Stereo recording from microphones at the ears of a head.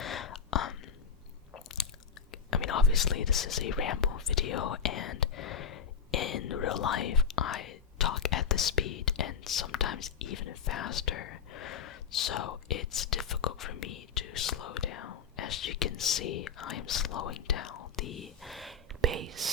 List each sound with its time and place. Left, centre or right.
0.0 s a sound: left
2.3 s speech: left
19.0 s speech: right